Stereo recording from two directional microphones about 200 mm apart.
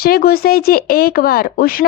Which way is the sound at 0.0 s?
50° left (ahead or behind).